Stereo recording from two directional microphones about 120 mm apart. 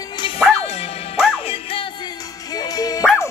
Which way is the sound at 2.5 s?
30° left (ahead or behind).